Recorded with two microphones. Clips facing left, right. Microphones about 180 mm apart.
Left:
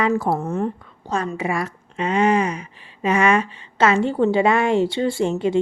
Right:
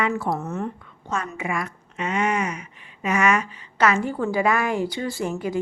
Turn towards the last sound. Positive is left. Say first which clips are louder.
# left 6 dB
turn(degrees=25)  # may be behind; listen again after turning